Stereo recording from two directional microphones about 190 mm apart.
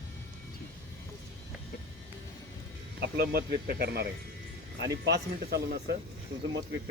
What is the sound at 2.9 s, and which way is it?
Speech, 55° right (ahead or behind).